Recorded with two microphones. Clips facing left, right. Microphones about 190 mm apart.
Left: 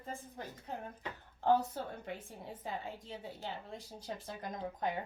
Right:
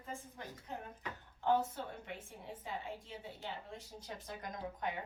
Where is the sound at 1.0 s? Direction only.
35° left (ahead or behind).